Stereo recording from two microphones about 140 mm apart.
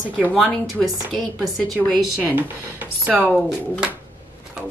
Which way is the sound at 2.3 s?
10° right (ahead or behind).